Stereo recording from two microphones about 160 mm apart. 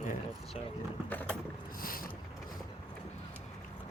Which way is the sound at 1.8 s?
60° left (ahead or behind).